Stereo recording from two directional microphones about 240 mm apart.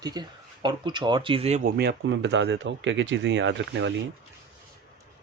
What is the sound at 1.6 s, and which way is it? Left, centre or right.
Speech, right.